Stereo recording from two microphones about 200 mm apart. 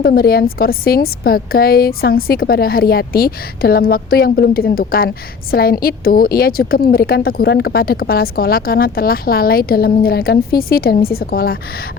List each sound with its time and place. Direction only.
0.0 s a woman's voice: 50° left (ahead or behind)